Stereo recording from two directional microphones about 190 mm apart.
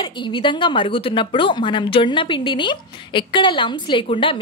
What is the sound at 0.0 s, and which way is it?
A woman's voice, 25° left (ahead or behind).